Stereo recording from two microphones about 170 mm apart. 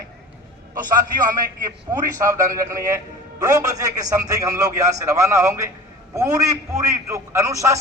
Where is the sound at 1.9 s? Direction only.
20° right (ahead or behind).